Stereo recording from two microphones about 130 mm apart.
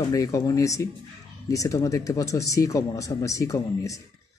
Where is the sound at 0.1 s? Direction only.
25° left (ahead or behind).